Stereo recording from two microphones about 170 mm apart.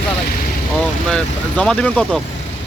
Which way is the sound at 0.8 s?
5° left (ahead or behind).